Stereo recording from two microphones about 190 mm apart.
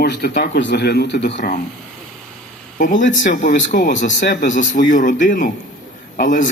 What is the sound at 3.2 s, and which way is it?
Speech, 45° left (ahead or behind).